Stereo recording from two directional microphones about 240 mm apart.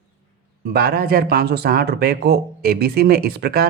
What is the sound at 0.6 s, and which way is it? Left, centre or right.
Speech, right.